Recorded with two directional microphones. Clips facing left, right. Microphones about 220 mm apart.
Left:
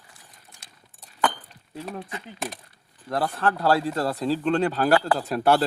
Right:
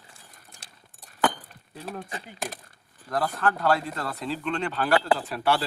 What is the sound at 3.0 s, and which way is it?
Speech, 30° left (ahead or behind).